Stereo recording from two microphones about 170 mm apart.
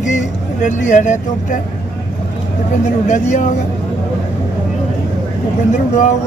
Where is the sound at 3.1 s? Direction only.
45° left (ahead or behind).